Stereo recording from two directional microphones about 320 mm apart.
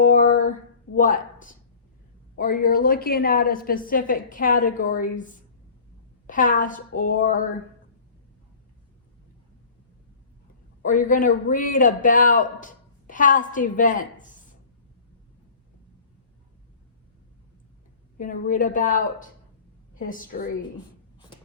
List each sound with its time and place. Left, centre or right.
0.0 s a sound: left
0.9 s a man's voice: left
6.2 s a man's voice: left
10.8 s a man's voice: left
18.2 s a man's voice: left